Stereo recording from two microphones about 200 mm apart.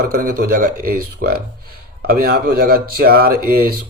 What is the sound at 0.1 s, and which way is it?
Speech, 45° right (ahead or behind).